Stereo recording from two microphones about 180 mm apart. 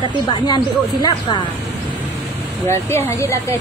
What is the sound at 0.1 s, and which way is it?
Speech, 25° left (ahead or behind).